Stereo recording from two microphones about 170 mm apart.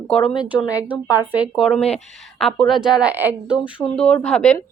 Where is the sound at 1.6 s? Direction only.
5° left (ahead or behind).